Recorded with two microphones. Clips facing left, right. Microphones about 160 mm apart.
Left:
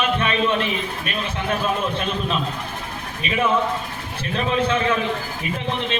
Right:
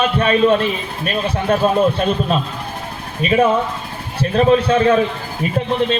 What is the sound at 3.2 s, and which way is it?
Speech, 40° right (ahead or behind).